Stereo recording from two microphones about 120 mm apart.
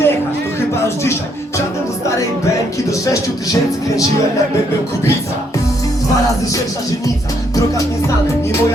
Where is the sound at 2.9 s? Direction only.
30° left (ahead or behind).